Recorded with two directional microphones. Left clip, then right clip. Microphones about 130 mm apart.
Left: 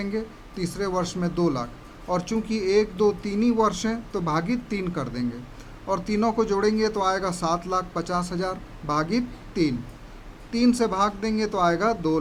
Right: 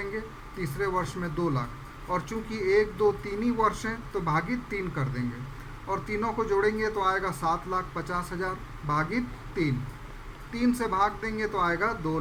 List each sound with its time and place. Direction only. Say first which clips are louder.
0.6 s speech: left 2 dB; 40° left (ahead or behind)